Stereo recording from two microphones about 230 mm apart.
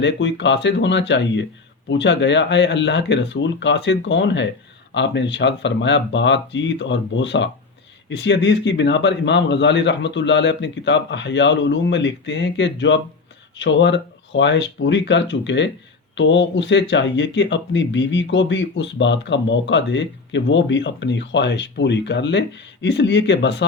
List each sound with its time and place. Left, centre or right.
0.0 s speech: left